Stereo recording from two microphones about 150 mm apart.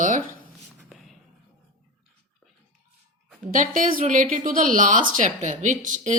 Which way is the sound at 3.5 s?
60° right (ahead or behind).